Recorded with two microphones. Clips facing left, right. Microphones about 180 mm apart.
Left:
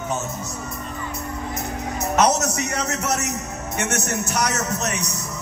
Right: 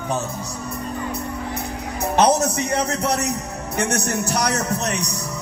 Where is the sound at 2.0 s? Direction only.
30° right (ahead or behind).